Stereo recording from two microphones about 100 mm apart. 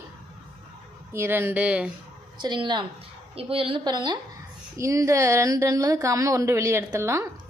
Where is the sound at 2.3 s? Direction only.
50° right (ahead or behind).